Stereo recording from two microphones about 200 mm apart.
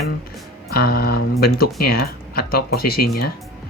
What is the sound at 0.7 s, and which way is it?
Speech, 50° left (ahead or behind).